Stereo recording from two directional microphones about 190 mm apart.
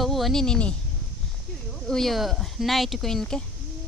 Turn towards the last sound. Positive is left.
turn(degrees=5)  # may be behind; listen again after turning